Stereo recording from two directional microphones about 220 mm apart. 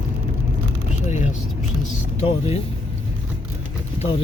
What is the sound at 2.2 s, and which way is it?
Speech, 25° left (ahead or behind).